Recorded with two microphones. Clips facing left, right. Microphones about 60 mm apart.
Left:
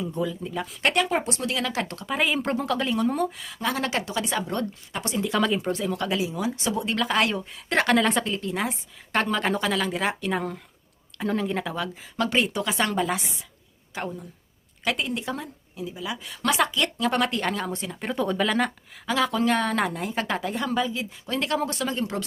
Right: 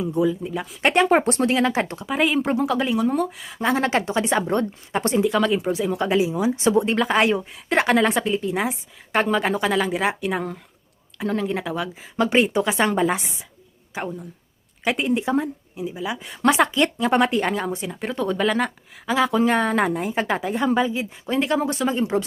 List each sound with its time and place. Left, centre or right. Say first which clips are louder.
0.0 s speech: right 7 dB; centre
0.8 s a woman's voice: right 5 dB; right
1.1 s a woman's voice: right 8 dB; right
2.0 s a woman's voice: right 3 dB; centre
3.4 s a woman's voice: right 6 dB; right
5.2 s a woman's voice: even; centre
5.8 s a woman's voice: right 6 dB; centre
13.9 s speech: right 3 dB; centre
14.8 s a woman's voice: right 6 dB; right
18.0 s a woman's voice: right 2 dB; centre
19.1 s a woman's voice: right 4 dB; centre